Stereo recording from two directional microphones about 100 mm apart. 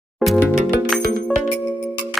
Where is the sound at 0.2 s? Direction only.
Centre (ahead or behind).